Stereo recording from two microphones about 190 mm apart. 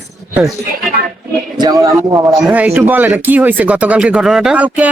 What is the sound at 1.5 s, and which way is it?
Speech, 20° right (ahead or behind).